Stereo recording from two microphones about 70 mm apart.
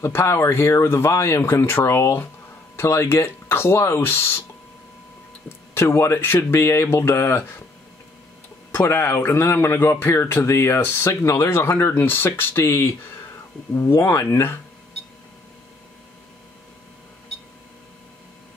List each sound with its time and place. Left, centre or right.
0.0 s speech: left
5.8 s speech: left
8.7 s speech: left